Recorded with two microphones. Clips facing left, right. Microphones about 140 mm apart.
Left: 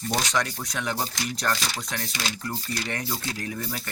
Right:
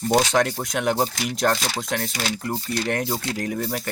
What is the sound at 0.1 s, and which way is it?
Speech, 55° right (ahead or behind).